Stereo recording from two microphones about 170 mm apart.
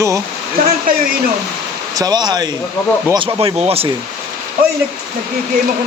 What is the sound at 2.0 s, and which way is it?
Speech, 25° right (ahead or behind).